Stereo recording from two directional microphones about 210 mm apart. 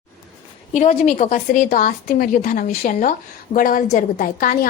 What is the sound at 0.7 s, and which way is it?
A woman's voice, 35° left (ahead or behind).